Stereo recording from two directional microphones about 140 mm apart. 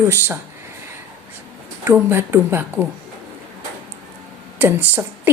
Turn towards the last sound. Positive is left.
turn(degrees=-15)  # may be behind; listen again after turning